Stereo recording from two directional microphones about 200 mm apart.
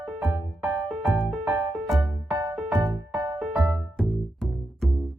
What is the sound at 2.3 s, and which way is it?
Music, 15° right (ahead or behind).